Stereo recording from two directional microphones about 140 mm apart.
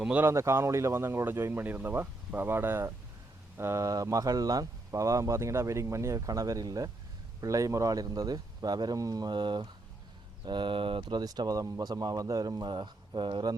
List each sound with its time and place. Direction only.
0.0 s speech: 10° right (ahead or behind); by 13.6 s 30° right (ahead or behind)